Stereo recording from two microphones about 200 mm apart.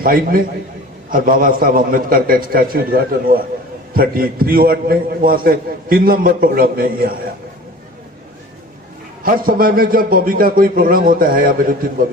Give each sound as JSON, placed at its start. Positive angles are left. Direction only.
{"t": 0.0, "sound": "a man's voice", "side_deg": -45}
{"t": 9.2, "sound": "a man's voice", "side_deg": -45}